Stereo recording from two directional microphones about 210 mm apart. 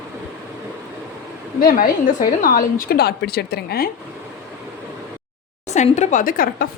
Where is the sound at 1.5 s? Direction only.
45° left (ahead or behind).